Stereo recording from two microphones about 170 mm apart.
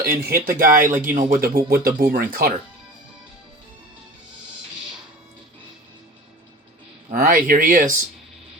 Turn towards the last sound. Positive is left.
turn(degrees=-55)  # may be behind; listen again after turning